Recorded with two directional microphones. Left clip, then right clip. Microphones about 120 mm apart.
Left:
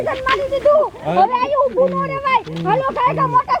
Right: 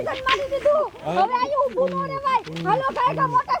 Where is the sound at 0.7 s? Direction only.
55° right (ahead or behind).